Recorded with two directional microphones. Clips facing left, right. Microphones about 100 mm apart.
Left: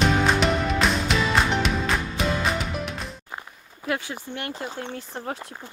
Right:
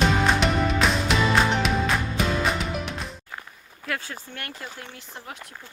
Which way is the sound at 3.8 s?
25° left (ahead or behind).